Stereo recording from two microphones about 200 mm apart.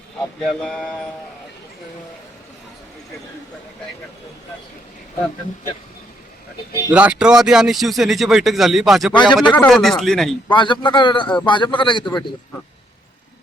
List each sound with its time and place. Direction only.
0.4 s speech: 5° left (ahead or behind)
6.9 s speech: 5° right (ahead or behind)
9.1 s a man's voice: 25° left (ahead or behind)
9.6 s speech: 5° left (ahead or behind)
10.5 s a man's voice: 25° left (ahead or behind)